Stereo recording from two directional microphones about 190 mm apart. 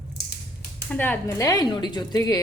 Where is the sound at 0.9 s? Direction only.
10° left (ahead or behind).